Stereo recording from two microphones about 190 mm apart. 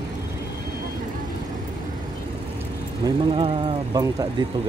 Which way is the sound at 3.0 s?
30° right (ahead or behind).